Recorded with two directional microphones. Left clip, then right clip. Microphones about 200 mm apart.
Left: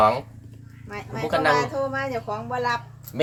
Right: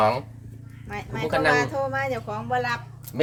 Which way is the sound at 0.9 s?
40° right (ahead or behind).